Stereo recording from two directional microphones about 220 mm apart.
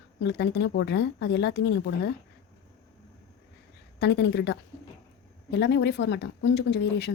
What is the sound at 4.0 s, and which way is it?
Speech, 50° left (ahead or behind).